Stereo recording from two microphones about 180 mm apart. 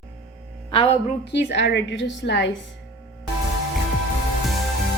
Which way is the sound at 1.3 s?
70° left (ahead or behind).